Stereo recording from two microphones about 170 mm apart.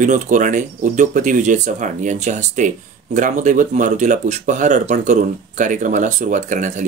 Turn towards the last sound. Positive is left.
turn(degrees=-45)  # may be behind; listen again after turning